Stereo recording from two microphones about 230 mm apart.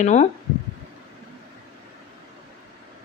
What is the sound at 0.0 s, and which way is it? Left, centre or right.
Speech, left.